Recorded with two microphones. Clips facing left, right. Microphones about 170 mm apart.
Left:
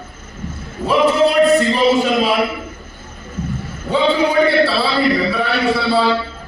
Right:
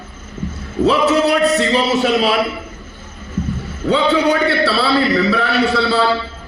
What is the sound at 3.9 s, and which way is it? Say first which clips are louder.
A man's voice: right 1 dB; 70° right (ahead or behind).